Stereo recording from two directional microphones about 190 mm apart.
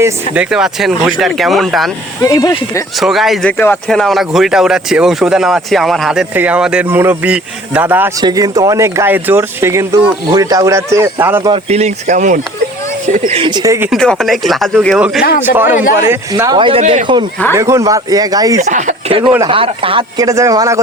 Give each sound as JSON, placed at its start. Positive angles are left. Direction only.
{"t": 0.0, "sound": "speech", "side_deg": -5}
{"t": 2.2, "sound": "speech", "side_deg": 20}
{"t": 3.0, "sound": "speech", "side_deg": 0}
{"t": 11.5, "sound": "a man's voice", "side_deg": -35}
{"t": 13.9, "sound": "speech", "side_deg": 0}
{"t": 16.8, "sound": "speech", "side_deg": -40}
{"t": 17.5, "sound": "speech", "side_deg": -15}
{"t": 18.6, "sound": "a man's voice", "side_deg": -40}